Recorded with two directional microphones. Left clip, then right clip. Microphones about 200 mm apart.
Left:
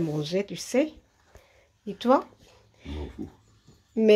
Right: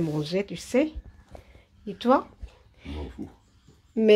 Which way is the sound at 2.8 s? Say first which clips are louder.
Even; centre (ahead or behind).